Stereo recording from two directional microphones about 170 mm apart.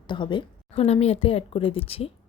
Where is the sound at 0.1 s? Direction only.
30° left (ahead or behind).